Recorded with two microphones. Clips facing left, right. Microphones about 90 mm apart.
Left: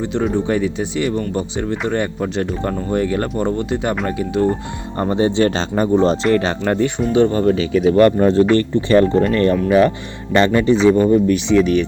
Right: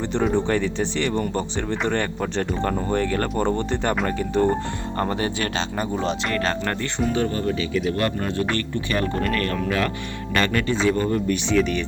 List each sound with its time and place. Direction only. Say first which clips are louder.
0.0 s speech: left 3 dB; 5° left (ahead or behind)
4.9 s speech: left 9 dB; 20° left (ahead or behind); by 5.9 s 35° left (ahead or behind)
6.3 s speech: left 7 dB; 20° left (ahead or behind)
7.4 s speech: left 8 dB; 55° left (ahead or behind)
8.2 s speech: left 12 dB; 30° left (ahead or behind)
11.3 s speech: left 6 dB; centre (ahead or behind)